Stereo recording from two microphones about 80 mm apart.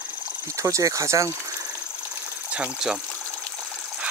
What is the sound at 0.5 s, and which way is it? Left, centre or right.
Speech, right.